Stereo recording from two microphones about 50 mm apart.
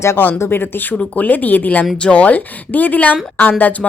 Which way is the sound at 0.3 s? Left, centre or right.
Left.